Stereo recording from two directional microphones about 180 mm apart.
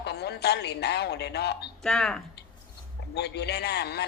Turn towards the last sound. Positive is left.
turn(degrees=65)  # may be behind; listen again after turning